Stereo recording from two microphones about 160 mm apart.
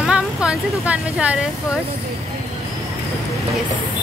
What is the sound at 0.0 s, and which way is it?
Speech, 5° right (ahead or behind).